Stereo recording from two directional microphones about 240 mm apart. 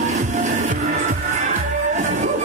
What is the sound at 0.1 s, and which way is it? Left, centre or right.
Music, right.